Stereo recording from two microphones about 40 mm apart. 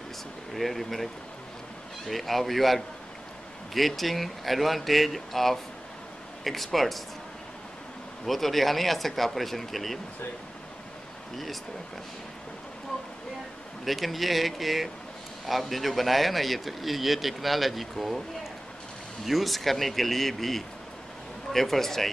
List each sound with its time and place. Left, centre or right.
0.6 s speech: centre
8.3 s speech: centre
13.8 s a man's voice: centre